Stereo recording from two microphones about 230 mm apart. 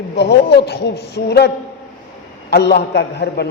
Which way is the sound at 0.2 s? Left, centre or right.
Left.